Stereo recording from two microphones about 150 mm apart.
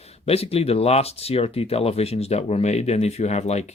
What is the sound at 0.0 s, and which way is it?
Speech, 45° left (ahead or behind).